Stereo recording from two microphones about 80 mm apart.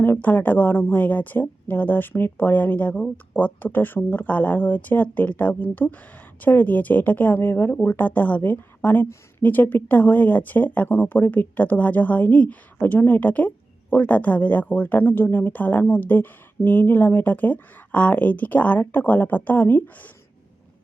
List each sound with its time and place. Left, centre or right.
0.0 s speech: left